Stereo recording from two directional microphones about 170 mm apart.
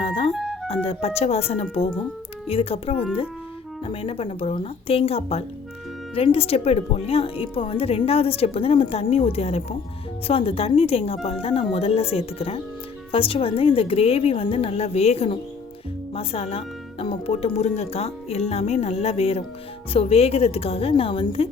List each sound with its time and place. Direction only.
0.0 s music: 35° left (ahead or behind)
0.3 s music: centre (ahead or behind)
0.7 s speech: 35° left (ahead or behind)